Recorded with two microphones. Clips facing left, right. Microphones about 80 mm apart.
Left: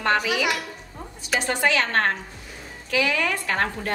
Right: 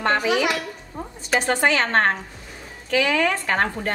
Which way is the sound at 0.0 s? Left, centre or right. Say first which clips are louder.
Right 2 dB; right.